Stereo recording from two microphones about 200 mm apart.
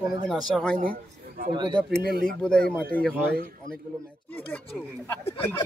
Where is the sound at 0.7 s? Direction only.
45° right (ahead or behind).